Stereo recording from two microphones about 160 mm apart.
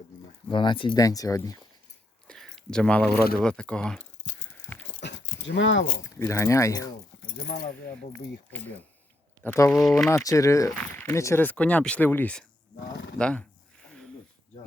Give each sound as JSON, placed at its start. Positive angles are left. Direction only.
{"t": 0.5, "sound": "speech", "side_deg": 30}
{"t": 2.2, "sound": "a sound", "side_deg": 5}
{"t": 3.3, "sound": "speech", "side_deg": 5}
{"t": 4.9, "sound": "keys jangling", "side_deg": 90}
{"t": 6.0, "sound": "speech", "side_deg": 15}
{"t": 7.4, "sound": "speech", "side_deg": 85}
{"t": 9.4, "sound": "speech", "side_deg": 10}
{"t": 10.2, "sound": "speech", "side_deg": 20}
{"t": 13.8, "sound": "a sound", "side_deg": 5}